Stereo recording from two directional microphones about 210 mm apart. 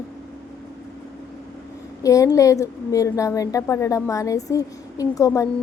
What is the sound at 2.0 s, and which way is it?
A woman's voice, 15° left (ahead or behind).